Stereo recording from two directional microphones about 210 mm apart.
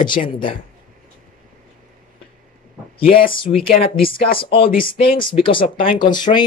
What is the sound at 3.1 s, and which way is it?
Speech, 40° left (ahead or behind).